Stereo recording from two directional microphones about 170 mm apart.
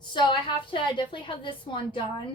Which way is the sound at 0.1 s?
30° left (ahead or behind).